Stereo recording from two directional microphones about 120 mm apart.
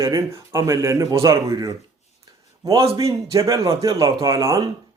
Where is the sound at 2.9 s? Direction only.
25° right (ahead or behind).